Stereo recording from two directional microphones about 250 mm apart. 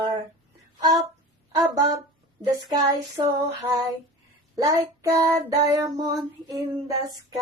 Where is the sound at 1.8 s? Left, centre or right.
Centre.